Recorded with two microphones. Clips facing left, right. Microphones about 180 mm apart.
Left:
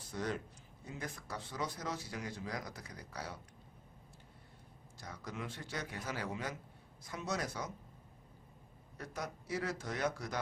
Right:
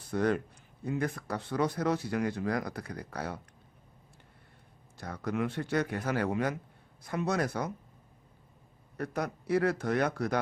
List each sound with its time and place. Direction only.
0.0 s speech: 60° right (ahead or behind)
4.9 s speech: 60° right (ahead or behind)
9.0 s speech: 60° right (ahead or behind)